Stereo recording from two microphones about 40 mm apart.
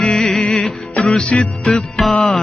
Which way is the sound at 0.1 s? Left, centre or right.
Centre.